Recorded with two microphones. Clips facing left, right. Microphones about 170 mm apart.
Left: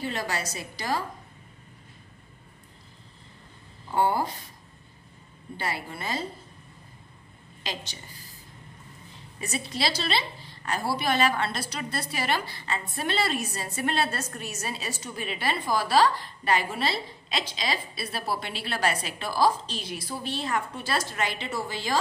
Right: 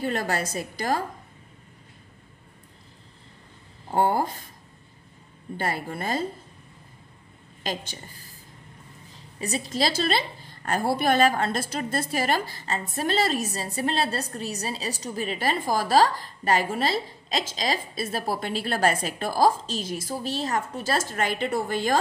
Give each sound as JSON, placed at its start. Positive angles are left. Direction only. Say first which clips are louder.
{"t": 0.0, "sound": "a woman's voice", "louder": "right 4 dB", "side_deg": -50}
{"t": 3.9, "sound": "a woman's voice", "louder": "right 2 dB", "side_deg": -50}
{"t": 5.6, "sound": "a woman's voice", "louder": "right 4 dB", "side_deg": -45}
{"t": 7.6, "sound": "a woman's voice", "louder": "right 5 dB", "side_deg": -50}
{"t": 9.4, "sound": "a woman's voice", "louder": "right 4 dB", "side_deg": -35}